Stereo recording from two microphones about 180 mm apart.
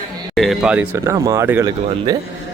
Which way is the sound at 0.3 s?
Centre (ahead or behind).